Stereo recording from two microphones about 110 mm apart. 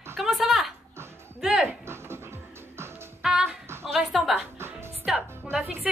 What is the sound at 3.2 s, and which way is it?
Music, 5° right (ahead or behind).